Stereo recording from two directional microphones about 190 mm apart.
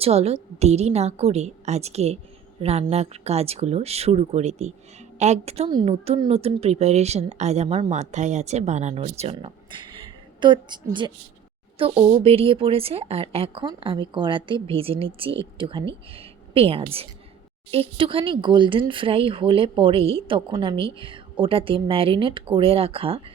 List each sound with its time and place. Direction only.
0.0 s a woman's voice: 35° right (ahead or behind)